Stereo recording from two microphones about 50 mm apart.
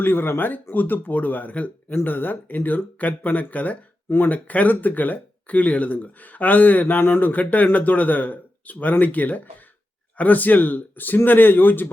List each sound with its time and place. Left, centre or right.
0.0 s speech: left
1.9 s speech: left